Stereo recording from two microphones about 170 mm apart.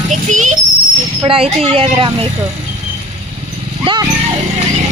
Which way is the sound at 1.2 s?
35° right (ahead or behind).